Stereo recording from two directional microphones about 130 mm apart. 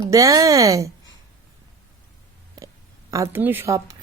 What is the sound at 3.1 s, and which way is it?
Speech, 20° right (ahead or behind).